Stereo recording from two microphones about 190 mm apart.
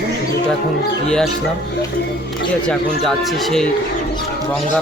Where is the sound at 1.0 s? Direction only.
5° left (ahead or behind).